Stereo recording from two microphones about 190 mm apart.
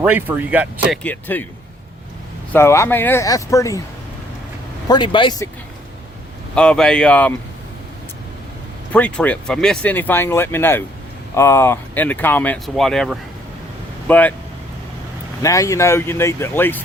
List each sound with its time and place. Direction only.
0.0 s speech: 10° right (ahead or behind)
0.9 s speech: 10° left (ahead or behind)
2.5 s speech: 15° left (ahead or behind)
4.9 s speech: 25° left (ahead or behind)
6.5 s speech: 5° left (ahead or behind)
8.9 s speech: 5° left (ahead or behind)
15.4 s speech: 15° left (ahead or behind)